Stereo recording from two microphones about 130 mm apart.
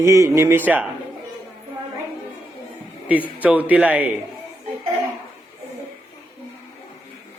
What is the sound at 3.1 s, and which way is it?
A man's voice, 10° right (ahead or behind).